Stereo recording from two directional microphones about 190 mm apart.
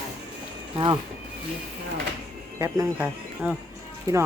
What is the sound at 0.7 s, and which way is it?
Speech, 25° right (ahead or behind).